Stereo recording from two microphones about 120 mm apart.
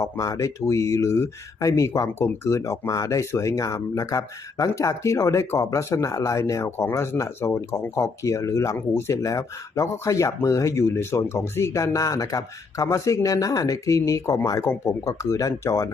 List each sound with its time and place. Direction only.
0.0 s speech: 30° left (ahead or behind)